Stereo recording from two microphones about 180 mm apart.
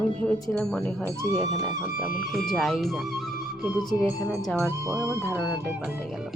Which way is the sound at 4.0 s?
15° left (ahead or behind).